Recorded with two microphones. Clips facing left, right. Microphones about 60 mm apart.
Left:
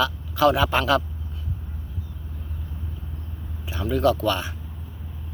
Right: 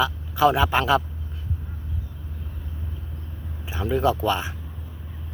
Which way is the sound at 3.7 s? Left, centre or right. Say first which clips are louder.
Left 1 dB; centre.